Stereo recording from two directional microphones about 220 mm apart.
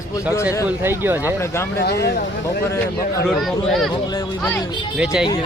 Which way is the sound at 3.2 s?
Centre (ahead or behind).